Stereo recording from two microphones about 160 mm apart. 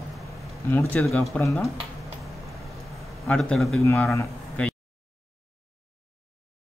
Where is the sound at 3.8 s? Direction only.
15° left (ahead or behind).